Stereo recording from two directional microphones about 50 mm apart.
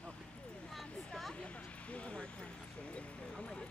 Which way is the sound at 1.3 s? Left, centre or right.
Left.